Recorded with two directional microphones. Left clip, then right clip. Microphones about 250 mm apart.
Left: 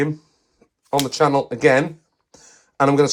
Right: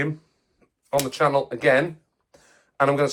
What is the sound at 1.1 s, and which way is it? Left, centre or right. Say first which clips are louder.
Speech: left 4 dB; left.